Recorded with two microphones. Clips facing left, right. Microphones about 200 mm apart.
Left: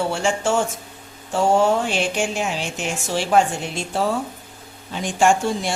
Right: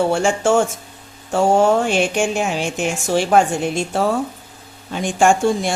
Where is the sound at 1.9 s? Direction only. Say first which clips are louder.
Right 5 dB; 50° right (ahead or behind).